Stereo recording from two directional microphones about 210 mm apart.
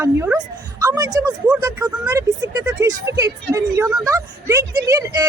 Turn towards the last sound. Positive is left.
turn(degrees=-15)  # may be behind; listen again after turning